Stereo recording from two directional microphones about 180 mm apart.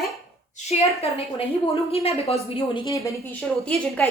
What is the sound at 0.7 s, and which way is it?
A woman's voice, 40° left (ahead or behind).